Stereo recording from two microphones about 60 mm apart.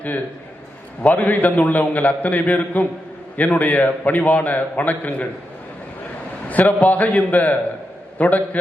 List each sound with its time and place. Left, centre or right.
1.0 s a man's voice: left
6.5 s a man's voice: left